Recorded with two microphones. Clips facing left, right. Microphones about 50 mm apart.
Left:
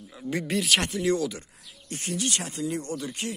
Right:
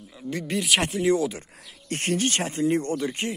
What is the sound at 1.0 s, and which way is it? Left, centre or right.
Speech, right.